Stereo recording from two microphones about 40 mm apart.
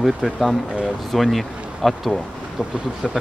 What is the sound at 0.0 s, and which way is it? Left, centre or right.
Speech, centre.